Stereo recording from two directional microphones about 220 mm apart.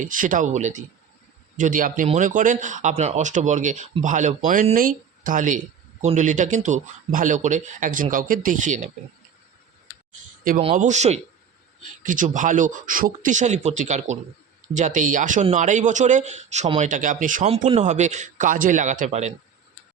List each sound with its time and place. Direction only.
0.0 s speech: 35° right (ahead or behind)
10.6 s speech: 30° right (ahead or behind)